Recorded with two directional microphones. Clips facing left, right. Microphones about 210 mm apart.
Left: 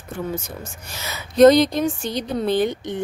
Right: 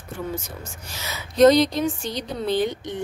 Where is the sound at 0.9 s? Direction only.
50° left (ahead or behind).